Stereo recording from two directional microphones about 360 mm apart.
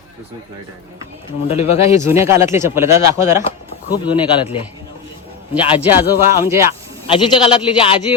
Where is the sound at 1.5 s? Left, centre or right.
Centre.